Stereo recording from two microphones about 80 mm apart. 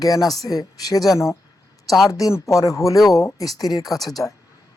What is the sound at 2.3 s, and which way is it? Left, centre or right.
Speech, left.